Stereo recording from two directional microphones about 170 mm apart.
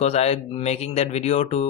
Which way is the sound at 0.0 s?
40° left (ahead or behind).